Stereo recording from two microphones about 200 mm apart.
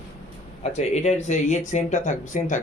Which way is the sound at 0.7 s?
35° left (ahead or behind).